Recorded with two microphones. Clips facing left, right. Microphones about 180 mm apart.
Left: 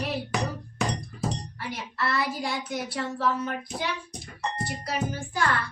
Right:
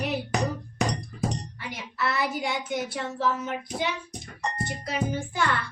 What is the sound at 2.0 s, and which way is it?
A woman's voice, centre (ahead or behind).